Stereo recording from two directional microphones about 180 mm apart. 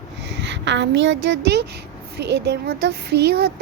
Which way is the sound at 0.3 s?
80° right.